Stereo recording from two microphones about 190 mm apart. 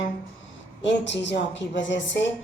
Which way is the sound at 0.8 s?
70° left (ahead or behind).